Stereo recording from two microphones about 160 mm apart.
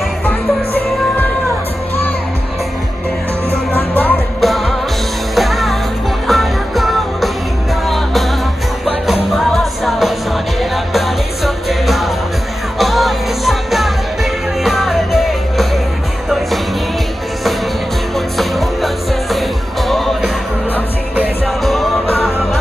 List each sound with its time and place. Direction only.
3.7 s music: 10° left (ahead or behind)
4.4 s music: centre (ahead or behind)
18.1 s music: centre (ahead or behind)
19.9 s music: centre (ahead or behind)
22.0 s music: 10° left (ahead or behind)